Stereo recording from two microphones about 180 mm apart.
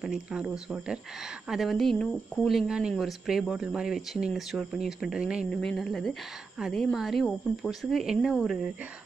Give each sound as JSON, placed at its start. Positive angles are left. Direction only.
{"t": 0.0, "sound": "speech", "side_deg": -5}